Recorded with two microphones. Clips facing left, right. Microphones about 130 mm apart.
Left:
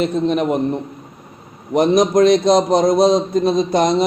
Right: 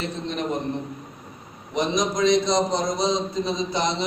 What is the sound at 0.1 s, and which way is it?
Speech, 55° left (ahead or behind).